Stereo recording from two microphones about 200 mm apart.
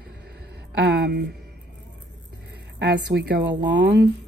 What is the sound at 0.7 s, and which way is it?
Speech, 55° right (ahead or behind).